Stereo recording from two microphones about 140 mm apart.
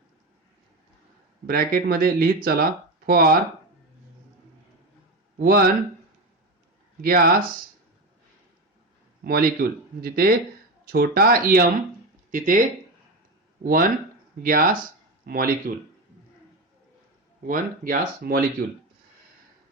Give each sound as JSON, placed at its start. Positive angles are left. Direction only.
{"t": 1.5, "sound": "speech", "side_deg": -90}
{"t": 5.4, "sound": "speech", "side_deg": -90}
{"t": 7.0, "sound": "speech", "side_deg": -90}
{"t": 9.2, "sound": "speech", "side_deg": -90}
{"t": 12.3, "sound": "speech", "side_deg": -70}
{"t": 13.7, "sound": "speech", "side_deg": -90}
{"t": 17.4, "sound": "speech", "side_deg": -85}